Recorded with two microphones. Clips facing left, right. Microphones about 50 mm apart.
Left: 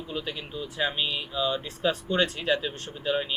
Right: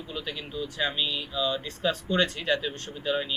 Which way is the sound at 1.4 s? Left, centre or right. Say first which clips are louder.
Left 1 dB; centre.